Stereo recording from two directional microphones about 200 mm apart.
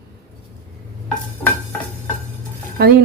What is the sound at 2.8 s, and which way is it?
Speech, 50° right (ahead or behind).